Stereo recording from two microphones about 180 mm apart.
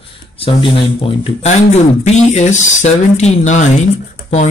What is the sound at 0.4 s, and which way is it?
Speech, 30° left (ahead or behind).